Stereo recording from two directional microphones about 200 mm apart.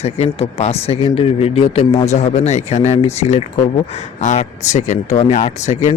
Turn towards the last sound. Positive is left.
turn(degrees=35)  # may be behind; listen again after turning